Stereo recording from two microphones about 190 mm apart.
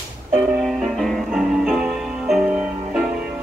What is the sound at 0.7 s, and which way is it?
Music, centre (ahead or behind).